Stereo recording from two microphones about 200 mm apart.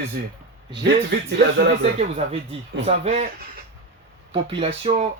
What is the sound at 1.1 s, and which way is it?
Speech, 50° right (ahead or behind).